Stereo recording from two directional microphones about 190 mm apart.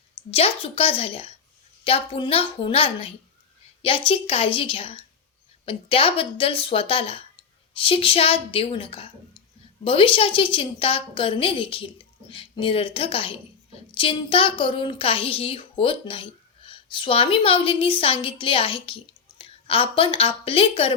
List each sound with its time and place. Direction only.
0.3 s a woman's voice: 30° left (ahead or behind)